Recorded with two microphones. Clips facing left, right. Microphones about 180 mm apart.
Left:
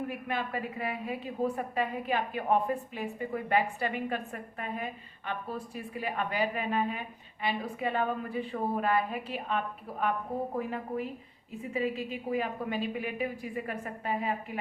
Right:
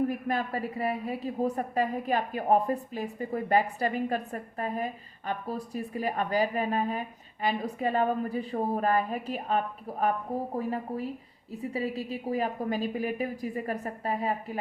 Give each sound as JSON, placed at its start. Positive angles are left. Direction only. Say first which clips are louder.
{"t": 0.1, "sound": "a woman's voice", "louder": "right 4 dB", "side_deg": -40}